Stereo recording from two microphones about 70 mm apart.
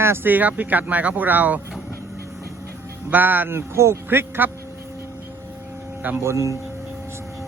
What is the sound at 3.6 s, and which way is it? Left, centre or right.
Speech, right.